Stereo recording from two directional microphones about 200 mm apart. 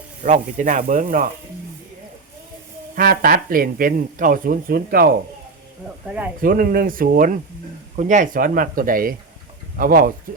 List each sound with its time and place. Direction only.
0.2 s speech: 40° right (ahead or behind)
2.9 s speech: 45° right (ahead or behind)
6.4 s speech: 45° right (ahead or behind)